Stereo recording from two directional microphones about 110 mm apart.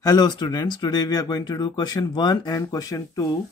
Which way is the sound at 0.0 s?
35° left (ahead or behind).